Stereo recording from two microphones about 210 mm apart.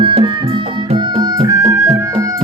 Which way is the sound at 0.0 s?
25° right (ahead or behind).